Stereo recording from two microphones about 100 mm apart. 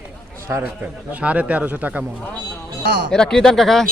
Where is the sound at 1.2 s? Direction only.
15° right (ahead or behind).